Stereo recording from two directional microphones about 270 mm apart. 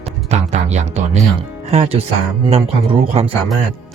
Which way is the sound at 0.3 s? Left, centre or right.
Right.